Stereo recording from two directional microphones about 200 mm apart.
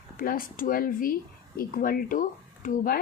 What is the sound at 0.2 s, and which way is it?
Speech, 45° left (ahead or behind).